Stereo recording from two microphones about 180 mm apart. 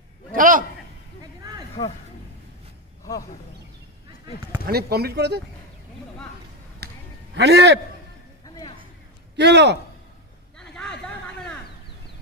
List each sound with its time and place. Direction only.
0.3 s a man's voice: 50° right (ahead or behind)
1.8 s speech: 35° left (ahead or behind)
4.6 s speech: 60° right (ahead or behind)
6.8 s a sound: 65° right (ahead or behind)
7.3 s a man's voice: 75° right (ahead or behind)
9.4 s a man's voice: 70° right (ahead or behind)
10.6 s a sound: 5° left (ahead or behind)